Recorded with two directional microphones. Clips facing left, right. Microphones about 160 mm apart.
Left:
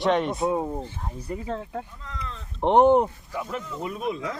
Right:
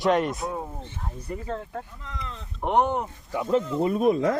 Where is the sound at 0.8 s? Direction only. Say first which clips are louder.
Left 2 dB; 10° left (ahead or behind).